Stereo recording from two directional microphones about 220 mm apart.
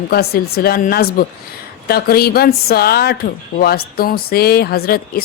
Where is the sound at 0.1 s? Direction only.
45° left (ahead or behind).